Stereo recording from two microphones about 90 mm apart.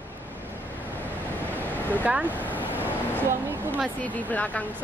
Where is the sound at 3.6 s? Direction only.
20° right (ahead or behind).